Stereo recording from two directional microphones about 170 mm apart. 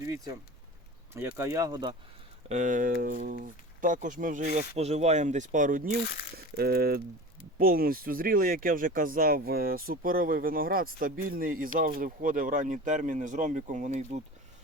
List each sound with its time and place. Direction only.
1.4 s speech: 20° right (ahead or behind)
2.5 s speech: 45° right (ahead or behind)
6.3 s speech: 65° right (ahead or behind); by 14.0 s 45° right (ahead or behind)